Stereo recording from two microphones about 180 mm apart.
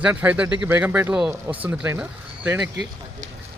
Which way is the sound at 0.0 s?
10° right (ahead or behind).